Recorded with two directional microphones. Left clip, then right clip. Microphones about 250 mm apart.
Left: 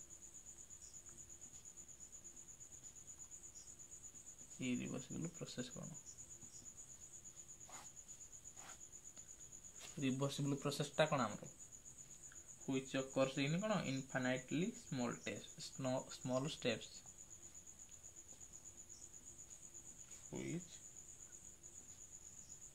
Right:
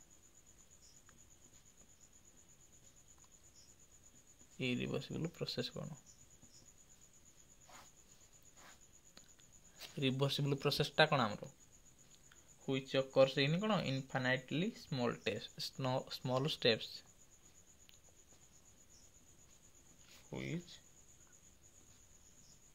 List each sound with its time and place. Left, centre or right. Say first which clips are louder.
4.6 s speech: right 6 dB; right
9.8 s speech: right 5 dB; right
12.6 s speech: right 6 dB; right
20.2 s cricket: right 3 dB; right